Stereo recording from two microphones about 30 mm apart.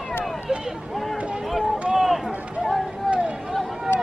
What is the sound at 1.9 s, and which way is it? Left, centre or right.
Run, centre.